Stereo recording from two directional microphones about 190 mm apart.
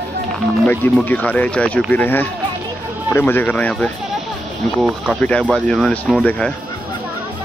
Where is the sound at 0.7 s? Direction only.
10° left (ahead or behind).